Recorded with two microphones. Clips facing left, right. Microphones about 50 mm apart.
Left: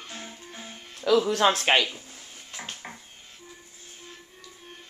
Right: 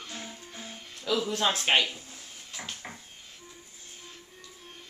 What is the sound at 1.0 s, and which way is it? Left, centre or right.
Speech, left.